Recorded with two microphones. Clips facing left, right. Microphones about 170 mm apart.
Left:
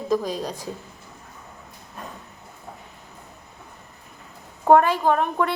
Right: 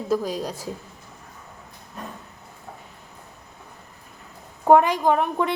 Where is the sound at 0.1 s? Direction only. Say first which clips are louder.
Even; 10° right (ahead or behind).